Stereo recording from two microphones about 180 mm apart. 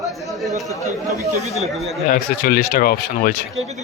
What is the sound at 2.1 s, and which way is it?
Speech, 55° left (ahead or behind).